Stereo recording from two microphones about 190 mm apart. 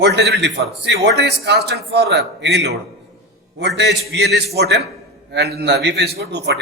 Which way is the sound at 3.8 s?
65° right (ahead or behind).